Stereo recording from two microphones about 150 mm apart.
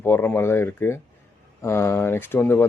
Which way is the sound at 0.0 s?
15° left (ahead or behind).